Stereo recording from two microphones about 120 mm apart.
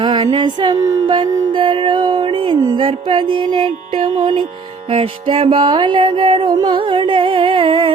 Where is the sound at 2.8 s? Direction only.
45° right (ahead or behind).